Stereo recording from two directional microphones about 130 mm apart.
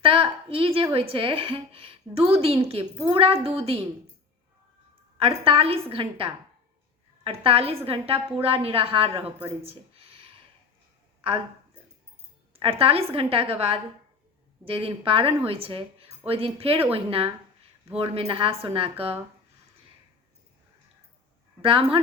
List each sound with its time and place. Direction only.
0.0 s a sound: 45° right (ahead or behind)
0.9 s a woman's voice: 45° right (ahead or behind)
5.1 s a woman's voice: 45° right (ahead or behind)
12.5 s a woman's voice: 50° right (ahead or behind)
21.6 s speech: 45° right (ahead or behind)